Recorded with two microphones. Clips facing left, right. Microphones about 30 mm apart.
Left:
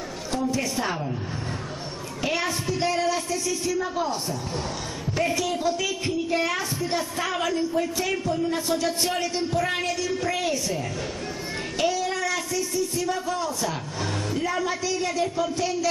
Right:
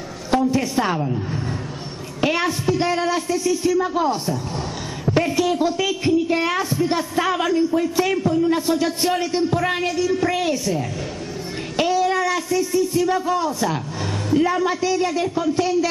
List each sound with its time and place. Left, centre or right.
0.4 s a woman's voice: centre
2.2 s a sound: centre
2.8 s a woman's voice: centre